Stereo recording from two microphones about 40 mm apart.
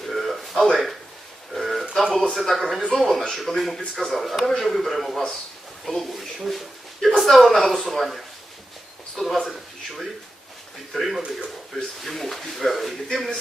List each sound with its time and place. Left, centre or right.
0.0 s a sound: centre
2.3 s speech: centre
5.1 s speech: centre
5.8 s speech: centre
9.5 s a sound: centre
10.9 s speech: centre
11.2 s speech: right
12.0 s speech: centre